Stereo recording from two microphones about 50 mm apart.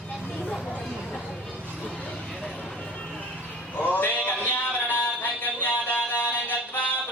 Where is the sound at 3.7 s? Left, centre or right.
Left.